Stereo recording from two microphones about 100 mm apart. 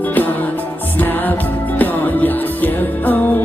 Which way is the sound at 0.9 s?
20° left (ahead or behind).